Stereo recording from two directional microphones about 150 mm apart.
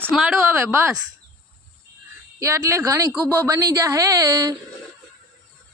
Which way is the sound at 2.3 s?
20° right (ahead or behind).